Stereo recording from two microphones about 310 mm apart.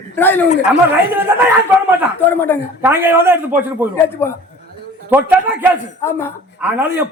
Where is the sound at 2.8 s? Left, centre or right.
Centre.